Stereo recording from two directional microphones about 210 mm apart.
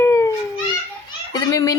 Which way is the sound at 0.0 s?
15° left (ahead or behind).